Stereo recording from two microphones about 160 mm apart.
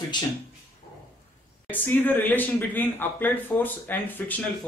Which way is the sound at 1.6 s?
10° left (ahead or behind).